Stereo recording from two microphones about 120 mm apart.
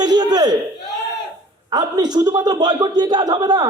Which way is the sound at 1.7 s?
35° right (ahead or behind).